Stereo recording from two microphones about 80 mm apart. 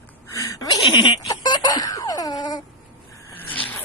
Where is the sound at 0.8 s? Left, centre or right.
Left.